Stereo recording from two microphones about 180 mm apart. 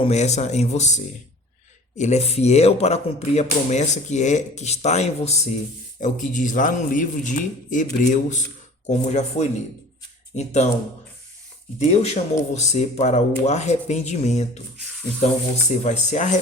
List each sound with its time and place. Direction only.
0.0 s a man's voice: 40° left (ahead or behind)
11.8 s speech: 40° left (ahead or behind)
15.8 s speech: 40° left (ahead or behind)